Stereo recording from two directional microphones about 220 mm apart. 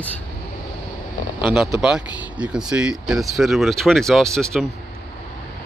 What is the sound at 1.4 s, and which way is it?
Speech, centre (ahead or behind).